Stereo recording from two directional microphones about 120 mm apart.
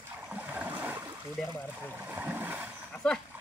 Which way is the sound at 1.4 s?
Centre (ahead or behind).